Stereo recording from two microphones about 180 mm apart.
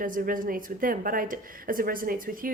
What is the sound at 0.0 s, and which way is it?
A woman's voice, 50° right (ahead or behind).